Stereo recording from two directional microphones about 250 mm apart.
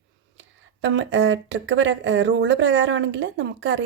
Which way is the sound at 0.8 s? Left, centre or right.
Right.